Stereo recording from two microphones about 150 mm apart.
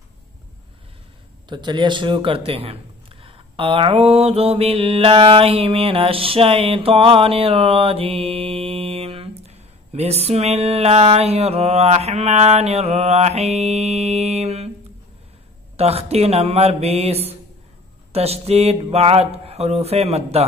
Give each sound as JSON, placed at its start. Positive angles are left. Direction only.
{"t": 1.5, "sound": "speech", "side_deg": -30}
{"t": 15.7, "sound": "speech", "side_deg": -45}